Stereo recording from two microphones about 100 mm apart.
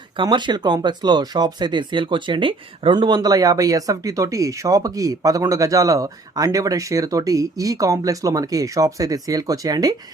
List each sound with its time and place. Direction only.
0.2 s speech: 50° right (ahead or behind)